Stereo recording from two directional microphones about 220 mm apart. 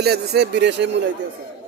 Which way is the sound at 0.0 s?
45° right (ahead or behind).